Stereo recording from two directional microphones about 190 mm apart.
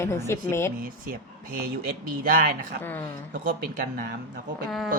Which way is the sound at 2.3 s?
50° right (ahead or behind).